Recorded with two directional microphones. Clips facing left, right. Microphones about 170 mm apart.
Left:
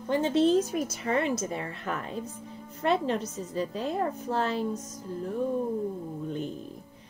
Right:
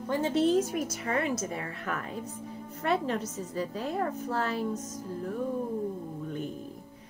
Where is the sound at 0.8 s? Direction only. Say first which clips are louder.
Left 2 dB; 25° left (ahead or behind).